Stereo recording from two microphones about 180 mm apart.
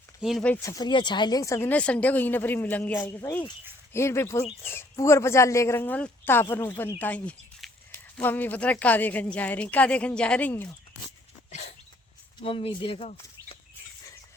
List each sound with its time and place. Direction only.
0.2 s speech: centre (ahead or behind)
12.4 s speech: 30° left (ahead or behind)